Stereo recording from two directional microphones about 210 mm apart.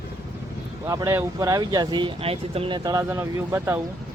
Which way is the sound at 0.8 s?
15° right (ahead or behind).